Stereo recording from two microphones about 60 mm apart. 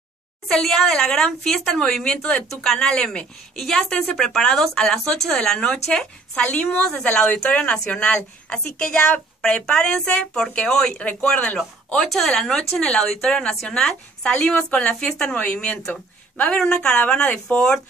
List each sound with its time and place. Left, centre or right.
0.5 s a woman's voice: centre
3.9 s a woman's voice: centre
11.0 s speech: left
11.2 s a woman's voice: centre